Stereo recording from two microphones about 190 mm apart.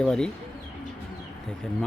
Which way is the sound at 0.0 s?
5° left (ahead or behind).